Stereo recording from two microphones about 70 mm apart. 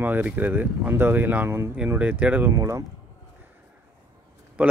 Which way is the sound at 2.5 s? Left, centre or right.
Right.